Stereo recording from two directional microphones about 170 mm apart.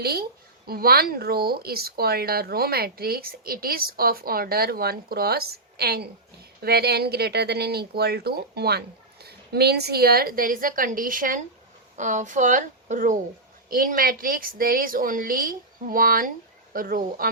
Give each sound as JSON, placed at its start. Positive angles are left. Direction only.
{"t": 0.0, "sound": "speech", "side_deg": -65}